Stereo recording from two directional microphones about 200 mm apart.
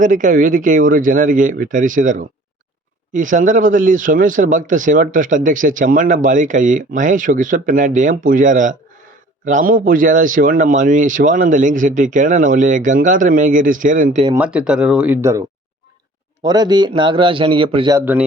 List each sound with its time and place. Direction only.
0.0 s speech: 40° right (ahead or behind)
14.3 s a man's voice: 5° right (ahead or behind); by 17.9 s 25° right (ahead or behind)
17.9 s speech: 10° right (ahead or behind)